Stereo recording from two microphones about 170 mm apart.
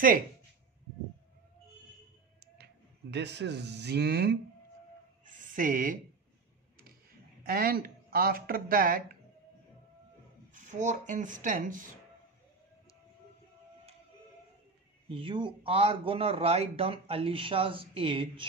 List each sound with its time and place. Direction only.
2.4 s speech: 70° right (ahead or behind)
5.2 s a sound: 50° right (ahead or behind)
7.4 s speech: 60° right (ahead or behind)
10.5 s speech: 45° right (ahead or behind)
15.0 s speech: 30° right (ahead or behind)